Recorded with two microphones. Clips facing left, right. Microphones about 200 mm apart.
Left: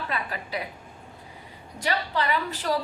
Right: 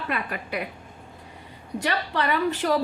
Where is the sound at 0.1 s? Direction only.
60° right (ahead or behind).